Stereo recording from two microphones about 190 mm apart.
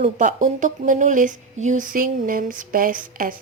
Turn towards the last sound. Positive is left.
turn(degrees=-45)  # may be behind; listen again after turning